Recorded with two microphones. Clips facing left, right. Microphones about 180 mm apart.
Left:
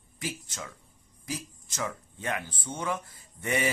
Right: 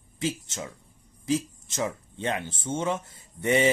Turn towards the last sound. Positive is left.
turn(degrees=-25)  # may be behind; listen again after turning